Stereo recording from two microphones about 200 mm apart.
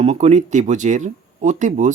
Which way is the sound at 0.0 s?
35° right (ahead or behind).